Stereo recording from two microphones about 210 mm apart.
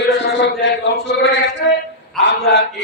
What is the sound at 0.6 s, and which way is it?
Chant, 55° left (ahead or behind).